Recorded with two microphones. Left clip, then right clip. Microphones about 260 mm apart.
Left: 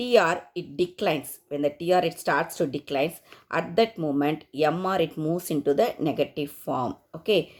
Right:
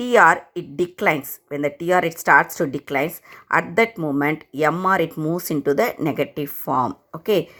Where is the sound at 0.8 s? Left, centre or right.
Centre.